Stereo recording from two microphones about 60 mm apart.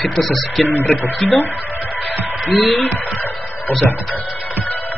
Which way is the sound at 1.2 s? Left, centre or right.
Left.